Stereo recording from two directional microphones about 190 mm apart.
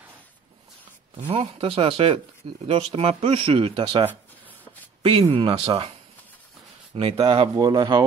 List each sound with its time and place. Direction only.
1.3 s speech: 30° right (ahead or behind)
5.2 s speech: 25° right (ahead or behind)
7.0 s speech: 30° right (ahead or behind)